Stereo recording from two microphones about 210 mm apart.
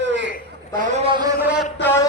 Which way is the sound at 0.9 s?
25° right (ahead or behind).